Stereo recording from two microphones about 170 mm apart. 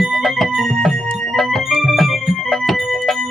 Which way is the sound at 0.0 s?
Centre (ahead or behind).